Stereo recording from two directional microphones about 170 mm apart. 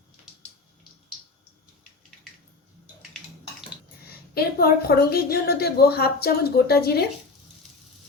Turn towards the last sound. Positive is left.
turn(degrees=65)  # may be behind; listen again after turning